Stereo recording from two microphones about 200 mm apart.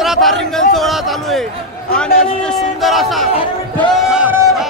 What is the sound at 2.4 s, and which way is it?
Speech, centre (ahead or behind).